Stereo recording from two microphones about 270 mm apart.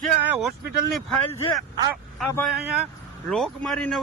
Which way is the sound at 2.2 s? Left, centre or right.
Centre.